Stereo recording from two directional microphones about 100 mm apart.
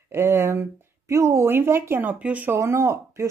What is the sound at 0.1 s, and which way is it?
Speech, 25° right (ahead or behind).